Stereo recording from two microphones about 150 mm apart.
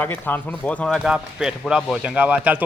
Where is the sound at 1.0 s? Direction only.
5° right (ahead or behind).